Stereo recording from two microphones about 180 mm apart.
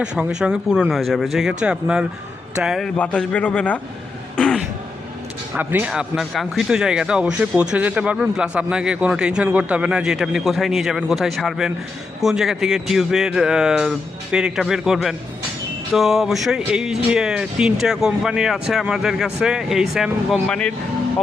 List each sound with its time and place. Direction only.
0.0 s speech: 5° right (ahead or behind)
4.4 s throat clearing: 5° left (ahead or behind)
5.5 s speech: 10° right (ahead or behind)